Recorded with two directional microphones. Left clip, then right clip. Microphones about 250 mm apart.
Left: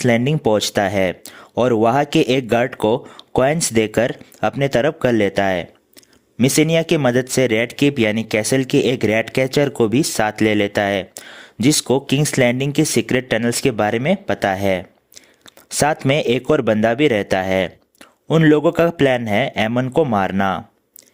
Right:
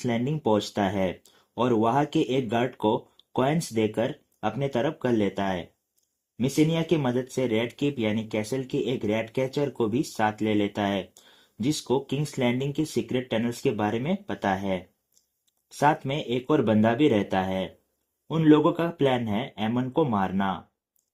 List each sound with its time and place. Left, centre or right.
0.0 s speech: left